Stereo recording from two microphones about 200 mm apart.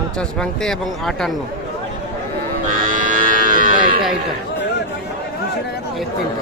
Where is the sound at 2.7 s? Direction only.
40° right (ahead or behind).